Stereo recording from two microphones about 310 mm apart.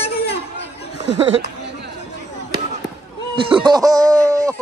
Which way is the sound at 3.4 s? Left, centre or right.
Centre.